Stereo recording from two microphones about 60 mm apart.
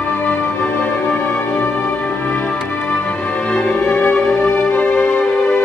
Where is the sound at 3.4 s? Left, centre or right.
Centre.